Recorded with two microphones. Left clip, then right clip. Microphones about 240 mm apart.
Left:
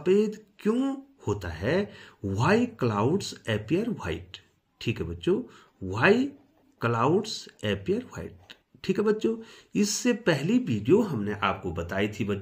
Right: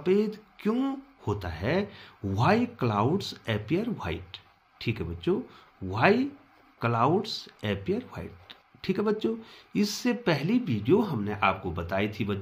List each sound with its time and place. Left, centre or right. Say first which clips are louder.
0.0 s speech: left 2 dB; centre